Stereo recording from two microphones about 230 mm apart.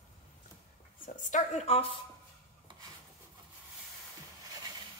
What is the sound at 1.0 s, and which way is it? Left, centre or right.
Speech, left.